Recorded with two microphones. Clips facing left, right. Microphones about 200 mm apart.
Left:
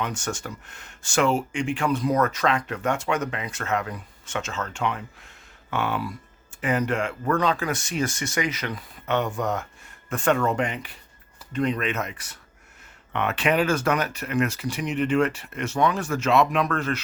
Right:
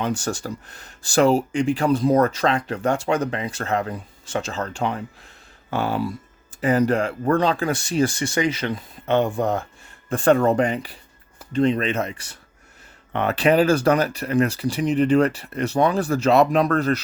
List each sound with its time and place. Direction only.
0.0 s speech: 35° right (ahead or behind)